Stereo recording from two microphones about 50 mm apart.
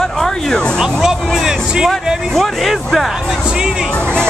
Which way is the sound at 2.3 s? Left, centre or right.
Centre.